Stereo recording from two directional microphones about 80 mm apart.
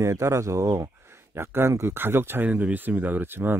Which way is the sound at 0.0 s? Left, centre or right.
Right.